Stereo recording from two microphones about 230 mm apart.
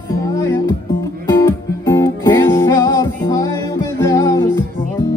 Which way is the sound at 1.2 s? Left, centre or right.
Centre.